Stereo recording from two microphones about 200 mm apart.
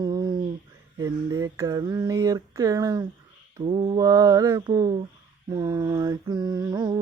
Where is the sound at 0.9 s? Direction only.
15° right (ahead or behind).